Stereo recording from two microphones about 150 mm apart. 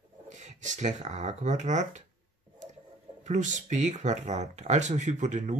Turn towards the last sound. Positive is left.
turn(degrees=-50)  # may be behind; listen again after turning